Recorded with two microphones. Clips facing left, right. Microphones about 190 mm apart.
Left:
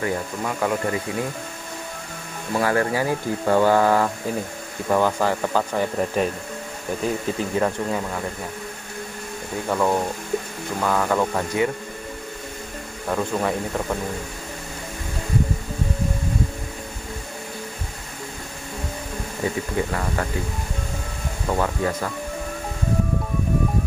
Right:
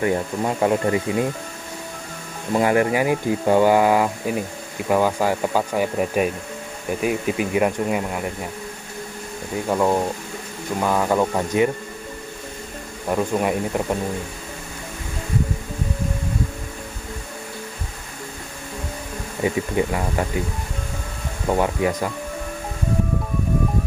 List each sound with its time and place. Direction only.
0.0 s speech: 25° right (ahead or behind)
2.5 s speech: 20° right (ahead or behind)
9.7 s speech: 15° right (ahead or behind)
13.1 s speech: 15° right (ahead or behind)
19.4 s speech: 15° right (ahead or behind)
21.5 s speech: 20° right (ahead or behind)